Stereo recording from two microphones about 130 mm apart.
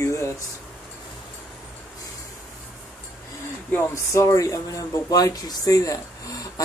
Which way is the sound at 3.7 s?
20° left (ahead or behind).